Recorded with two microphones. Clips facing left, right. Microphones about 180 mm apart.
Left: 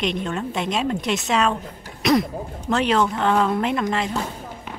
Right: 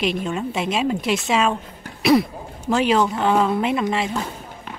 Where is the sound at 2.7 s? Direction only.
5° right (ahead or behind).